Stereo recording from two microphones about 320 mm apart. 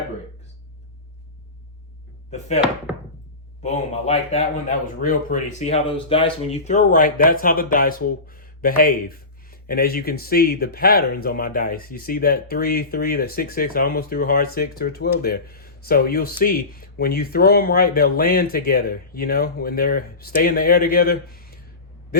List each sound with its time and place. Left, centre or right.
2.9 s thunk: centre
3.6 s speech: centre